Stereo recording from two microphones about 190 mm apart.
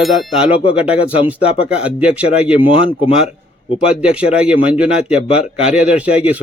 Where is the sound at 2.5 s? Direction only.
30° left (ahead or behind).